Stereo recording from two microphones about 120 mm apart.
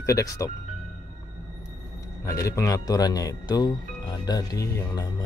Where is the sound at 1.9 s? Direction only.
30° left (ahead or behind).